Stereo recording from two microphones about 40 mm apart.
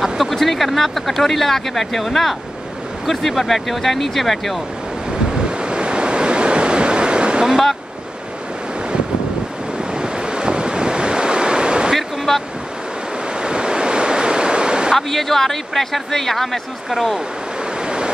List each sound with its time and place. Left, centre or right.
0.0 s speech: centre
5.4 s waves: right
9.9 s waves: right
11.9 s waves: centre
13.4 s waves: right
15.0 s speech: centre
17.8 s waves: right